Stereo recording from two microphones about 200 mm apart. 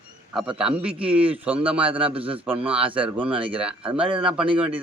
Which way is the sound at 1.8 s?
25° right (ahead or behind).